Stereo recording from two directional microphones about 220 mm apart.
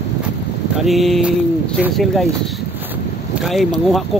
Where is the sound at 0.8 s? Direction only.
Centre (ahead or behind).